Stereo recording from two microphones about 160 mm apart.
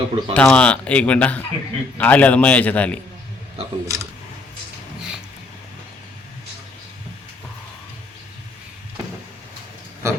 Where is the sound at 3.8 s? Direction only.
20° right (ahead or behind).